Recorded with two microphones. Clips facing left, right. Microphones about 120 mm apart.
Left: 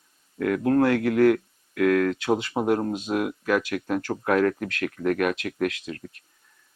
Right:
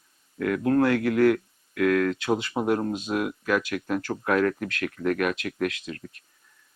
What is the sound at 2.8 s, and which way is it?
Speech, 25° left (ahead or behind).